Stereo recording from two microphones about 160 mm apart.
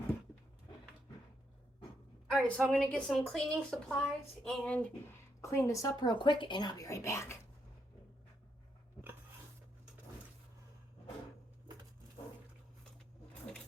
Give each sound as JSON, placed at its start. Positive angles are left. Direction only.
{"t": 2.3, "sound": "a woman's voice", "side_deg": 0}
{"t": 5.4, "sound": "speech", "side_deg": 20}